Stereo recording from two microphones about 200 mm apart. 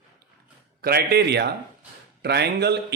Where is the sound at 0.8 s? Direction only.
50° right (ahead or behind).